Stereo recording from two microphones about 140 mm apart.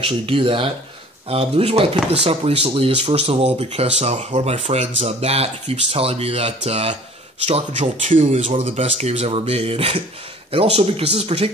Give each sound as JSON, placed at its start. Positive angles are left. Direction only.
{"t": 0.0, "sound": "speech", "side_deg": -40}